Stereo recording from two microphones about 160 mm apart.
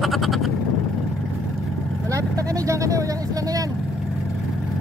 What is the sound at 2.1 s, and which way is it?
Vehicle, 20° right (ahead or behind).